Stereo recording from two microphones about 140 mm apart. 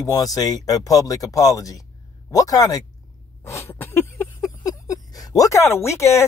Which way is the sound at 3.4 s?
20° left (ahead or behind).